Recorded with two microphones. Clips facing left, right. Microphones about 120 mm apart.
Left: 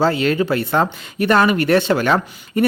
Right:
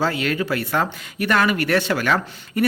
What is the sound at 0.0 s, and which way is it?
Speech, 30° left (ahead or behind).